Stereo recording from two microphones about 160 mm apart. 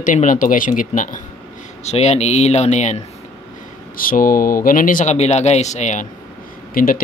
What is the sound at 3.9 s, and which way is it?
Speech, 60° left (ahead or behind).